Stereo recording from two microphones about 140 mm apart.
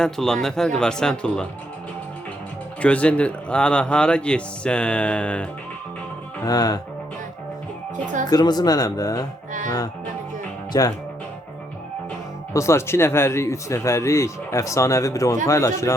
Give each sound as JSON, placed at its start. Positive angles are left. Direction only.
{"t": 0.0, "sound": "speech", "side_deg": 5}
{"t": 2.8, "sound": "speech", "side_deg": 10}
{"t": 6.4, "sound": "speech", "side_deg": 25}
{"t": 8.3, "sound": "speech", "side_deg": 30}
{"t": 12.5, "sound": "speech", "side_deg": 20}